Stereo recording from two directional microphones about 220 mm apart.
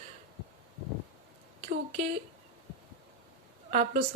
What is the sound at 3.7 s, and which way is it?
Speech, 35° right (ahead or behind).